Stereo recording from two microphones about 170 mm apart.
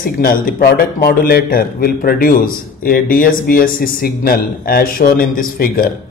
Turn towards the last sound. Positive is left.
turn(degrees=55)  # may be behind; listen again after turning